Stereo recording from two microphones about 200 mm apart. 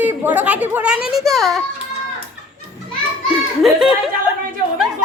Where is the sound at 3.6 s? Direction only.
Centre (ahead or behind).